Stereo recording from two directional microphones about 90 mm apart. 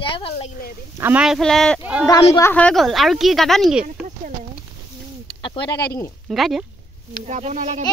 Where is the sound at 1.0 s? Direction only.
25° right (ahead or behind).